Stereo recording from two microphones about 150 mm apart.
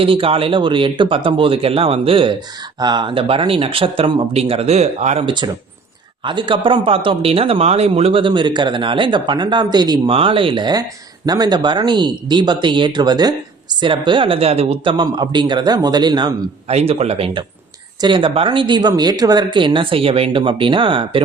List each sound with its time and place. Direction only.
0.0 s speech: 40° right (ahead or behind)
5.2 s speech: 30° right (ahead or behind)
16.6 s speech: 40° right (ahead or behind)